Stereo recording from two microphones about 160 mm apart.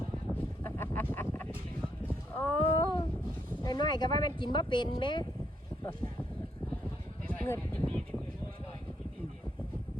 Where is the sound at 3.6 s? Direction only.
25° left (ahead or behind).